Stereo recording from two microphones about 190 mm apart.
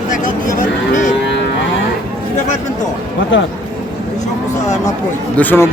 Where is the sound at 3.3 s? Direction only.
75° left (ahead or behind).